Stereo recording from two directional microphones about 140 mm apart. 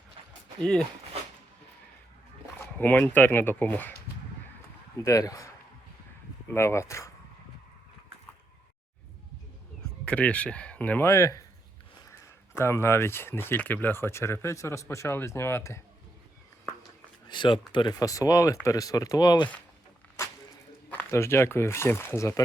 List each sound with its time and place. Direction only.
0.6 s speech: 5° left (ahead or behind)
2.7 s speech: 10° left (ahead or behind)
5.0 s speech: 25° left (ahead or behind)
6.5 s speech: 20° left (ahead or behind)
10.1 s speech: 10° left (ahead or behind)
12.5 s speech: 20° left (ahead or behind)
17.2 s speech: 35° left (ahead or behind)
20.2 s a sound: 20° left (ahead or behind)
20.9 s speech: 15° left (ahead or behind)